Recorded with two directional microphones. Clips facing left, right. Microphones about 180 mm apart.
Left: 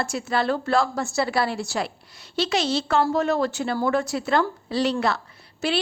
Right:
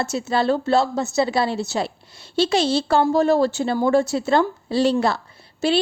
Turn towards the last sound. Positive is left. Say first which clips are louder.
# right 5 dB
turn(degrees=-25)  # may be behind; listen again after turning